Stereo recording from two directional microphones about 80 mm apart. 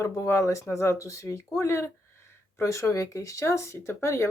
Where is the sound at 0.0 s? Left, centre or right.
Left.